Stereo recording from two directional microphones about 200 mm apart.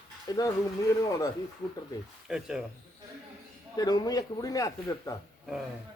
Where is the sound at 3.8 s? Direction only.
20° left (ahead or behind).